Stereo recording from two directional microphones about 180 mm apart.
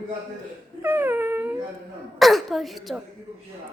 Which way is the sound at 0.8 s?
10° right (ahead or behind).